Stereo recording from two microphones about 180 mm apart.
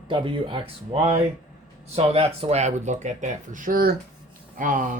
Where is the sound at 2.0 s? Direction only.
35° right (ahead or behind).